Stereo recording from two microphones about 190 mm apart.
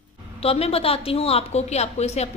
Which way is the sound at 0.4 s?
30° left (ahead or behind).